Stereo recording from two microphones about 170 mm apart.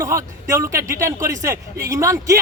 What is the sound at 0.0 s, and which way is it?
Speech, 15° right (ahead or behind).